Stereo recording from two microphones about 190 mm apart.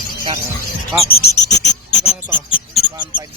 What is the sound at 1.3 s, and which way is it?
Cricket, 65° left (ahead or behind).